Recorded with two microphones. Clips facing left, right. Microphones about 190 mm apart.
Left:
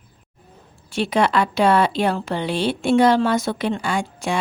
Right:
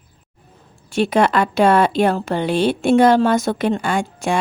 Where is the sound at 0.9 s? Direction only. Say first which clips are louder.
Right 3 dB; 50° right (ahead or behind).